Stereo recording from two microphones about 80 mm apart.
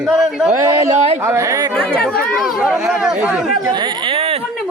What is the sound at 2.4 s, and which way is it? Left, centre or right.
Speech, centre.